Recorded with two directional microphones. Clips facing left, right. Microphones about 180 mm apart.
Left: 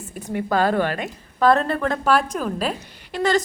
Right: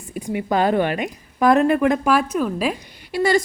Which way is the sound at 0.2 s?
15° right (ahead or behind).